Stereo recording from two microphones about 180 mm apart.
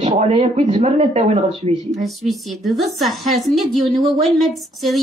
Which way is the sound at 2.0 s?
Centre (ahead or behind).